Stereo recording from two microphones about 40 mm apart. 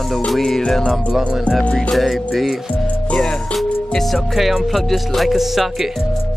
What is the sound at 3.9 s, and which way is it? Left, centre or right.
Music, centre.